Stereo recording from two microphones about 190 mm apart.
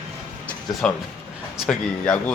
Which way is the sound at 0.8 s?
5° left (ahead or behind).